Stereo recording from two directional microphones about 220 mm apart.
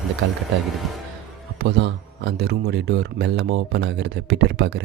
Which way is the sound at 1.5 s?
50° right (ahead or behind).